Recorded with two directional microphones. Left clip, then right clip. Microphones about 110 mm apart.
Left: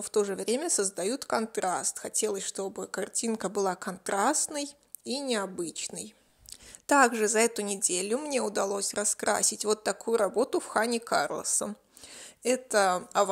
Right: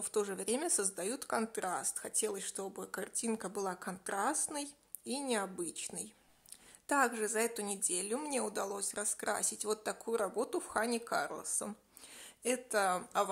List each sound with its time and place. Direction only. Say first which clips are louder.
0.0 s speech: left 8 dB; 30° left (ahead or behind)
6.9 s speech: left 9 dB; 50° left (ahead or behind)